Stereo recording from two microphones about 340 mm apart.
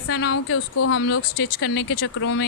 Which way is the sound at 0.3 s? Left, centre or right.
Left.